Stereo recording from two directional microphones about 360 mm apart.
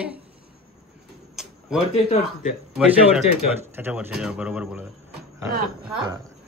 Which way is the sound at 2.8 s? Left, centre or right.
Centre.